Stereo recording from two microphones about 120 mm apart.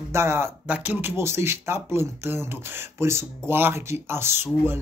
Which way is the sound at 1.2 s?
20° right (ahead or behind).